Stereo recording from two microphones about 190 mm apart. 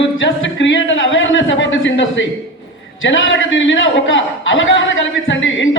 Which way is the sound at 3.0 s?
90° left.